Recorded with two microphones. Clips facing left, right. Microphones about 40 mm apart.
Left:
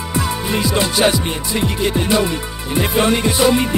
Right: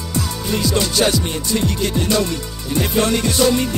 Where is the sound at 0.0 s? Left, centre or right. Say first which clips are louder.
Left 3 dB; left.